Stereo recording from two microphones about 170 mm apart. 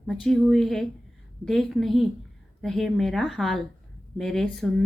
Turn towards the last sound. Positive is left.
turn(degrees=0)  # may be behind; listen again after turning